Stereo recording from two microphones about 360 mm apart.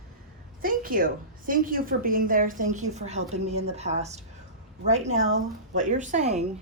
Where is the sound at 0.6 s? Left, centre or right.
Right.